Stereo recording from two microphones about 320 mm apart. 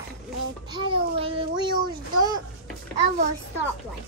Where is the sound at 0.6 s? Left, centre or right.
Centre.